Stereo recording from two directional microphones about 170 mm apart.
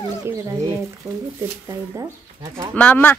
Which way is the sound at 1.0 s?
5° right (ahead or behind).